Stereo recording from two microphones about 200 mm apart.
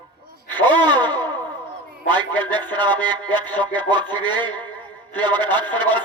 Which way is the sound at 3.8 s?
20° right (ahead or behind).